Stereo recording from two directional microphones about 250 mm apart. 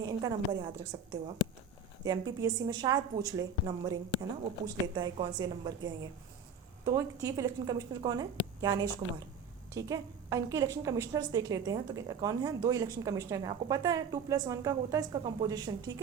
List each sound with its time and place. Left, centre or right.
0.0 s a woman's voice: centre
9.7 s a woman's voice: centre